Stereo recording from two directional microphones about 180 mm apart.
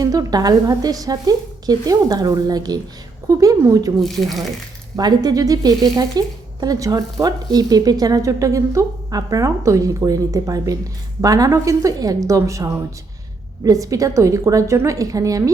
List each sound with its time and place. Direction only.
0.0 s speech: 20° right (ahead or behind)
4.0 s speech: centre (ahead or behind)
4.9 s a woman's voice: 20° right (ahead or behind)